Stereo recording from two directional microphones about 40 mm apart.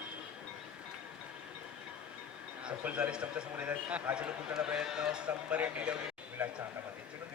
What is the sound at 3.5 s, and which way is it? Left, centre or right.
A man's voice, right.